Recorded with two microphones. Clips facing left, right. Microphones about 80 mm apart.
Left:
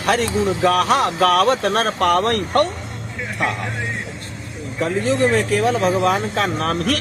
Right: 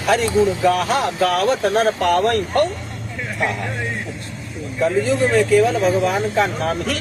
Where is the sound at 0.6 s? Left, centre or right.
Left.